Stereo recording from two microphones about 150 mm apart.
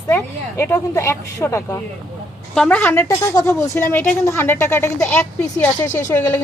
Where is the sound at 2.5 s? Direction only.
5° left (ahead or behind).